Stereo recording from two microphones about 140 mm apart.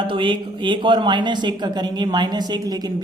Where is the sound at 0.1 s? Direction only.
35° right (ahead or behind).